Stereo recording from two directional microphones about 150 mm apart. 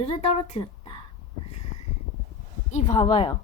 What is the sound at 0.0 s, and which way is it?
Speech, 40° left (ahead or behind).